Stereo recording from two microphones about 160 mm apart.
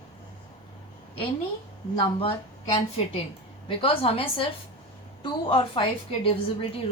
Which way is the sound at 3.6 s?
35° left (ahead or behind).